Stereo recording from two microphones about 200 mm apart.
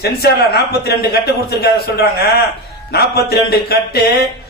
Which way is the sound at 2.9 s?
55° left (ahead or behind).